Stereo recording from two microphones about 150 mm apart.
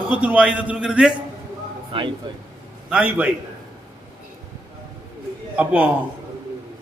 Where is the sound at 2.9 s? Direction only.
10° right (ahead or behind).